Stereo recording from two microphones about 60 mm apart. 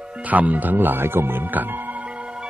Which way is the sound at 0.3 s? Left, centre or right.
Right.